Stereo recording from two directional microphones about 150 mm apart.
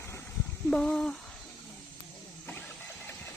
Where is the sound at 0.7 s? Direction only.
5° left (ahead or behind).